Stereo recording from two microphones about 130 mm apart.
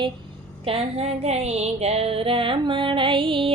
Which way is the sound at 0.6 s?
45° right (ahead or behind).